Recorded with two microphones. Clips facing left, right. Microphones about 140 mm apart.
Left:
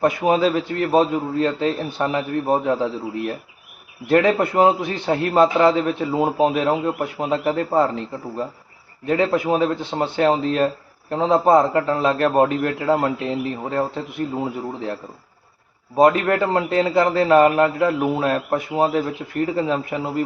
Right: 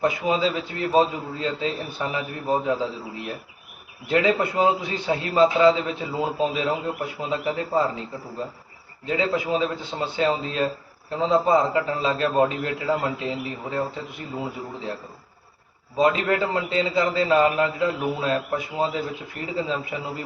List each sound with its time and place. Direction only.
0.0 s a man's voice: 60° left (ahead or behind)
16.0 s a man's voice: 50° left (ahead or behind)